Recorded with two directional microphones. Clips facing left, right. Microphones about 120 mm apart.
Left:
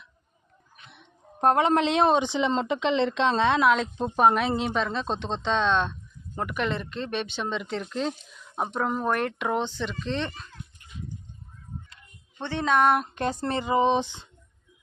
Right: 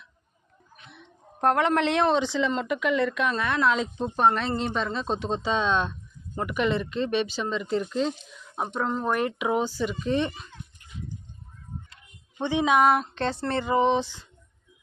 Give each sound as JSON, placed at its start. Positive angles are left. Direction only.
{"t": 1.4, "sound": "speech", "side_deg": 20}
{"t": 3.6, "sound": "speech", "side_deg": 5}
{"t": 12.4, "sound": "speech", "side_deg": -15}
{"t": 13.1, "sound": "speech", "side_deg": 15}